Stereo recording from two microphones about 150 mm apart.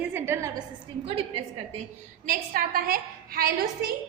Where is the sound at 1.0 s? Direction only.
40° right (ahead or behind).